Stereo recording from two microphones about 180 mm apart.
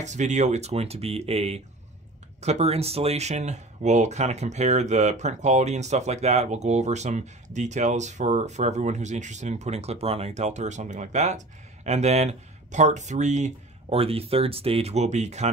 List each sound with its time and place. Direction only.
0.0 s speech: 40° right (ahead or behind)